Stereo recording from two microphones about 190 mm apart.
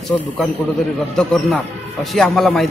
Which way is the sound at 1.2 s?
Centre (ahead or behind).